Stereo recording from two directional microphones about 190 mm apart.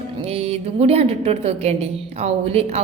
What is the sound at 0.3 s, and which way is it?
A woman's voice, 35° right (ahead or behind).